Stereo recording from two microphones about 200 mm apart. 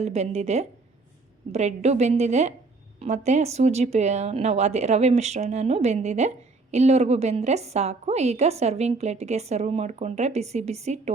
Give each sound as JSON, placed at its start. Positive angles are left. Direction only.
{"t": 0.0, "sound": "a woman's voice", "side_deg": -30}